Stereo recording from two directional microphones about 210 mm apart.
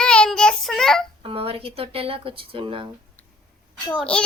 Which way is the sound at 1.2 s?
25° right (ahead or behind).